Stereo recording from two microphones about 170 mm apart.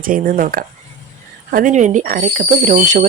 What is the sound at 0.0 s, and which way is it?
Speech, 55° right (ahead or behind).